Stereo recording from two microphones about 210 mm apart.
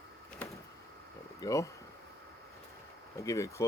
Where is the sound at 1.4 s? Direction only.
15° left (ahead or behind).